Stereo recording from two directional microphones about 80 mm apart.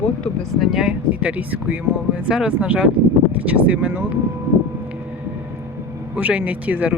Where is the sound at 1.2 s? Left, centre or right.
Centre.